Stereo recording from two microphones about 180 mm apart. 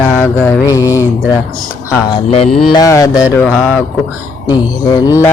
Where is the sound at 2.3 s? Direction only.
35° left (ahead or behind).